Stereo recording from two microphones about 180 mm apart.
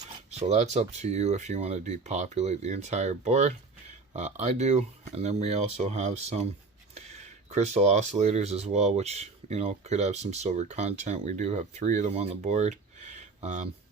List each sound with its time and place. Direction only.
0.3 s speech: 40° right (ahead or behind)